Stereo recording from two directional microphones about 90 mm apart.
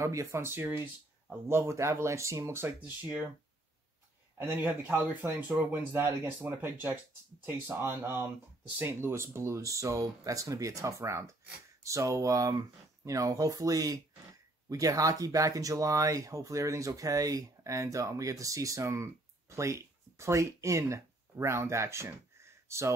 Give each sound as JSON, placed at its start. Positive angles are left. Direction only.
{"t": 0.0, "sound": "speech", "side_deg": -35}
{"t": 4.4, "sound": "speech", "side_deg": -25}
{"t": 22.4, "sound": "a sound", "side_deg": -30}